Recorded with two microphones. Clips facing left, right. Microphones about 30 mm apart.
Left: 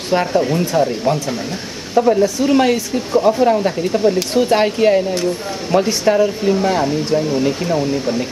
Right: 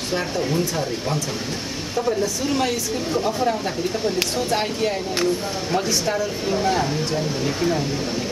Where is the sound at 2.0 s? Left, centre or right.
Left.